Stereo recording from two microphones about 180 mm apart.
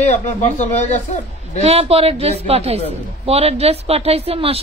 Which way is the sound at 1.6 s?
35° right (ahead or behind).